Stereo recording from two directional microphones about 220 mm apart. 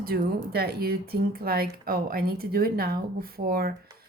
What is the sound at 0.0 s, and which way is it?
Speech, 45° right (ahead or behind).